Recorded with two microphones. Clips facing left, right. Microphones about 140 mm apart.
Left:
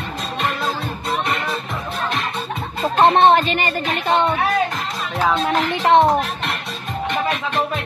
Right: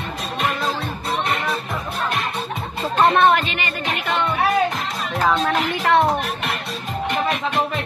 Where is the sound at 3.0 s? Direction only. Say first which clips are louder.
Left 3 dB; 25° left (ahead or behind).